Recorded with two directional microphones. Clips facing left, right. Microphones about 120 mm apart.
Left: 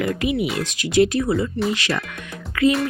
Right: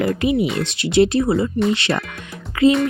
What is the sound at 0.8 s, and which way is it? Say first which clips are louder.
Speech: right 2 dB; 30° right (ahead or behind).